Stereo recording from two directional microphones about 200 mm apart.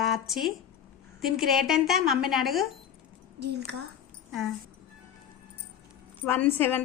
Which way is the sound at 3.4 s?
55° right (ahead or behind).